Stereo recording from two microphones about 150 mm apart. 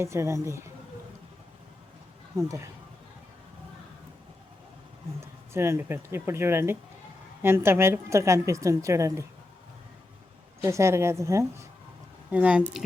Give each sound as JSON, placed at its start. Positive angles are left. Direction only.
{"t": 0.0, "sound": "a woman's voice", "side_deg": -20}
{"t": 5.2, "sound": "a woman's voice", "side_deg": -15}
{"t": 10.6, "sound": "a woman's voice", "side_deg": -20}
{"t": 12.3, "sound": "speech", "side_deg": -10}